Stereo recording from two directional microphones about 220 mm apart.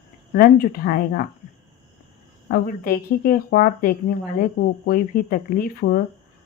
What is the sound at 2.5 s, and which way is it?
Speech, 40° left (ahead or behind).